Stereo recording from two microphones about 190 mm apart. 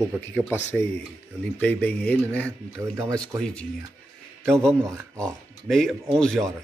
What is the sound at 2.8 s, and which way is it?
Speech, 15° right (ahead or behind).